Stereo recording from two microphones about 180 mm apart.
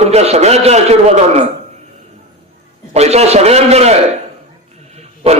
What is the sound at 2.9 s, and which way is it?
A man's voice, 35° right (ahead or behind).